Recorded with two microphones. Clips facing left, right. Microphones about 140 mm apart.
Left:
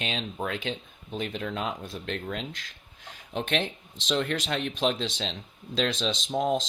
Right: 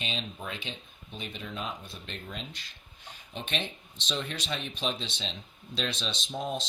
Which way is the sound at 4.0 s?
90° left.